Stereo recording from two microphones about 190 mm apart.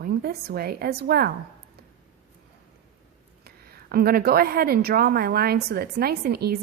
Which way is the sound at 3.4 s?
55° right (ahead or behind).